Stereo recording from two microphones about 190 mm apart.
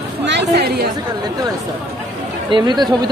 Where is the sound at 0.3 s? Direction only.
60° right (ahead or behind).